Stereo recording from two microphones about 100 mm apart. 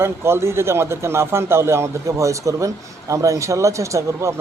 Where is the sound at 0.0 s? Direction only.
25° right (ahead or behind).